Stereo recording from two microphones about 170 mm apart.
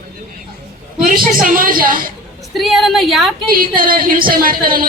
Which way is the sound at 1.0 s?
55° right (ahead or behind).